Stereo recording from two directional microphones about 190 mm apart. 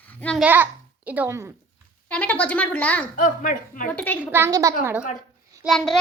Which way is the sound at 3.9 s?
5° left (ahead or behind).